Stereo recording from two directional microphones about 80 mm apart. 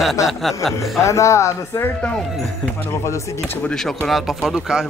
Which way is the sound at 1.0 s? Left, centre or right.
Left.